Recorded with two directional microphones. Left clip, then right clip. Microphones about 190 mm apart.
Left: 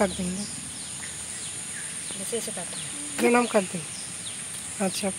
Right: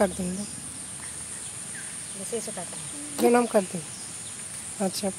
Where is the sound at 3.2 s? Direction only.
5° right (ahead or behind).